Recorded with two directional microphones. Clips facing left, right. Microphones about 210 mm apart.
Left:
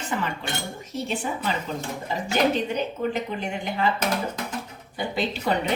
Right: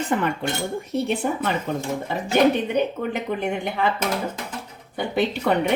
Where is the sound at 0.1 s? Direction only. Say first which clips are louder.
Right 4 dB; 55° right (ahead or behind).